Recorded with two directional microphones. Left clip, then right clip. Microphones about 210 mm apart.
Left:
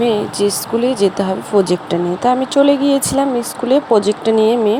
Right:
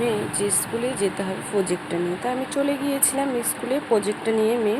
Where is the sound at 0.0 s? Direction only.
30° left (ahead or behind).